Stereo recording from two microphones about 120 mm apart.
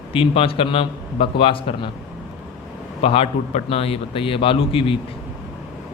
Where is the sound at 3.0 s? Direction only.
50° left (ahead or behind).